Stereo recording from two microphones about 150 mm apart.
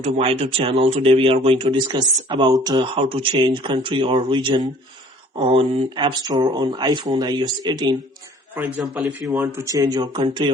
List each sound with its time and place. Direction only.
0.0 s speech: 40° right (ahead or behind)
9.4 s speech: 20° right (ahead or behind)